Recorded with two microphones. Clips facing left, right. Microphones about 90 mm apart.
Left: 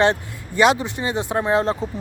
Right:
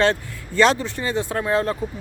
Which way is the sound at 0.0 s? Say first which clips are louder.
Left 1 dB; 15° left (ahead or behind).